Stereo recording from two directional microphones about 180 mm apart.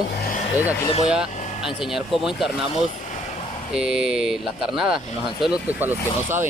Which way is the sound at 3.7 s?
5° right (ahead or behind).